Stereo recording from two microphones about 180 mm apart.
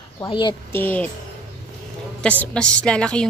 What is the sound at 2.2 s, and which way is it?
Speech, 5° left (ahead or behind).